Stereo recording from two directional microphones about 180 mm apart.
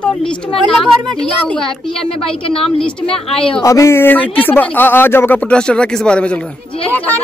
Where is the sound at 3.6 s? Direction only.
15° left (ahead or behind).